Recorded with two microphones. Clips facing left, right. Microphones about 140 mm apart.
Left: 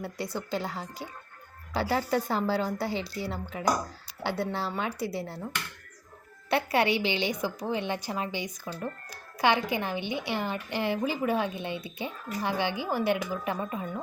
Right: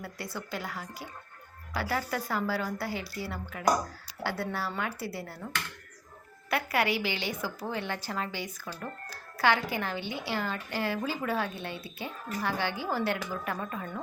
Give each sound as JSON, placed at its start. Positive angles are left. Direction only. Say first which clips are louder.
{"t": 0.0, "sound": "a woman's voice", "louder": "left 5 dB", "side_deg": 20}
{"t": 6.5, "sound": "a woman's voice", "louder": "left 3 dB", "side_deg": 25}